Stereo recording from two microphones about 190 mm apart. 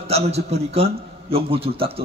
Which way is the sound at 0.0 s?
35° right (ahead or behind).